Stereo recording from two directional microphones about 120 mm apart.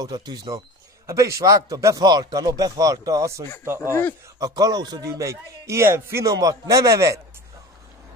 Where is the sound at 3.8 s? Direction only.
20° left (ahead or behind).